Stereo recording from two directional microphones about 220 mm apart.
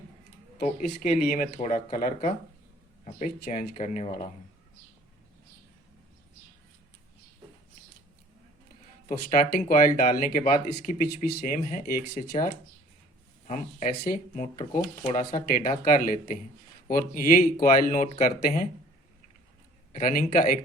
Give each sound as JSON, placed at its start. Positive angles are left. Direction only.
{"t": 0.6, "sound": "speech", "side_deg": 35}
{"t": 9.0, "sound": "speech", "side_deg": 35}
{"t": 13.5, "sound": "speech", "side_deg": 30}
{"t": 19.9, "sound": "speech", "side_deg": 40}